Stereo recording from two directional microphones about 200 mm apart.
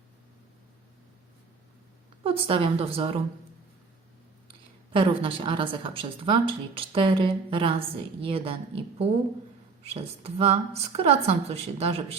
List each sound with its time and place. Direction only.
2.2 s a woman's voice: 25° right (ahead or behind)
4.9 s a woman's voice: 25° right (ahead or behind)